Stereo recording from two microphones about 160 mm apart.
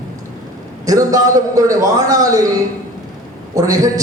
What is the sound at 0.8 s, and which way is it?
A man's voice, 20° right (ahead or behind).